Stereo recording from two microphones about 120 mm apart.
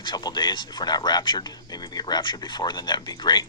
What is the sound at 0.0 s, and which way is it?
Speech, 40° left (ahead or behind).